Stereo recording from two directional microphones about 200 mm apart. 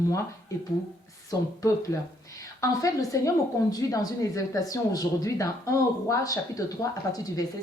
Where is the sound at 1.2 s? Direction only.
15° left (ahead or behind).